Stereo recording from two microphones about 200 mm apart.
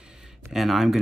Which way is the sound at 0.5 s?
Centre (ahead or behind).